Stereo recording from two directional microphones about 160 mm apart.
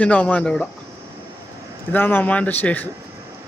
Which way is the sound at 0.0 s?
10° left (ahead or behind).